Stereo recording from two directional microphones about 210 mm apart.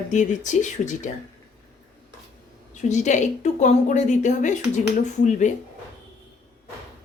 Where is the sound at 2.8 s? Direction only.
35° left (ahead or behind).